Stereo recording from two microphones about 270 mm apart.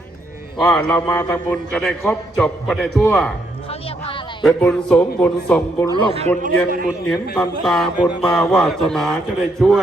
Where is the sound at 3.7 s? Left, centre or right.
Left.